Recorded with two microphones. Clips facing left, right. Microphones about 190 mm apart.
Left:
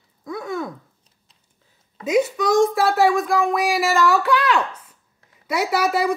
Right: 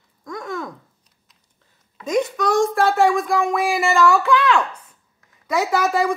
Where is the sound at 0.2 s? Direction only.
5° left (ahead or behind).